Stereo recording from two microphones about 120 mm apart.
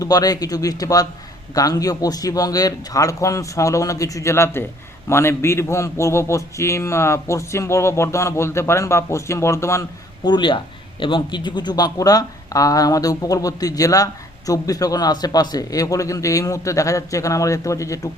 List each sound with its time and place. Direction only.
0.0 s speech: 30° left (ahead or behind)
10.2 s speech: 40° left (ahead or behind)